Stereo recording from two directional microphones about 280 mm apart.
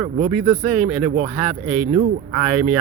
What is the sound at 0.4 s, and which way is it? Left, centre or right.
Speech, right.